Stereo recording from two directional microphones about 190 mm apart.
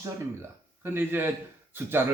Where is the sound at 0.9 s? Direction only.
10° right (ahead or behind).